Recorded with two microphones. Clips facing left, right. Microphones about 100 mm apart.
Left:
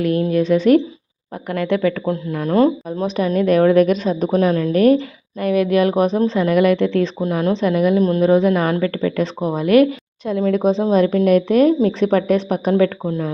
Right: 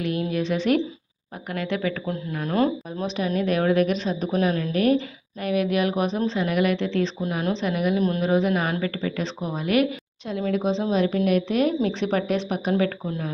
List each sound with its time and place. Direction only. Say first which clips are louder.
0.0 s a woman's voice: left 8 dB; 45° left (ahead or behind)
2.0 s speech: left 7 dB; 30° left (ahead or behind)
3.2 s a woman's voice: left 8 dB; 50° left (ahead or behind)
7.2 s a woman's voice: left 7 dB; 35° left (ahead or behind)
7.9 s speech: left 7 dB; 30° left (ahead or behind)
8.2 s a woman's voice: left 7 dB; 45° left (ahead or behind)
13.1 s speech: left 7 dB; 35° left (ahead or behind)